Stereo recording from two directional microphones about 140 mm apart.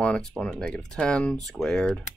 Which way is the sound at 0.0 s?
5° left (ahead or behind).